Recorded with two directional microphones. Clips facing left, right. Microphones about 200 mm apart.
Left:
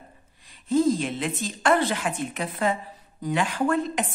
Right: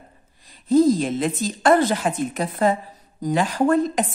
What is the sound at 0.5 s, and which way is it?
A woman's voice, 40° right (ahead or behind).